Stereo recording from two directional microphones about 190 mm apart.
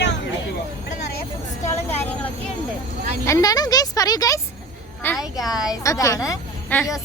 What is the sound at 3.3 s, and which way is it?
A woman's voice, 20° left (ahead or behind).